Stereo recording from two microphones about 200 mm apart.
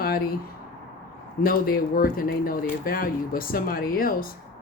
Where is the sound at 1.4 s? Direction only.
45° left (ahead or behind).